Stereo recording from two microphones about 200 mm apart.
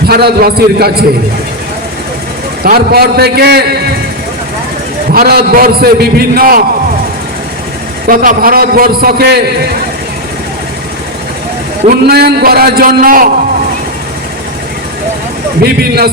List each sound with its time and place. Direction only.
0.1 s a man's voice: 50° right (ahead or behind)
2.6 s a man's voice: 50° right (ahead or behind)
5.1 s a man's voice: 50° right (ahead or behind)
8.0 s a man's voice: 45° right (ahead or behind)
12.0 s a man's voice: 50° right (ahead or behind)
15.6 s a man's voice: 50° right (ahead or behind)